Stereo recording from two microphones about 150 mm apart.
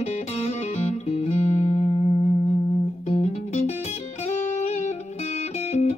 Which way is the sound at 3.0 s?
50° left (ahead or behind).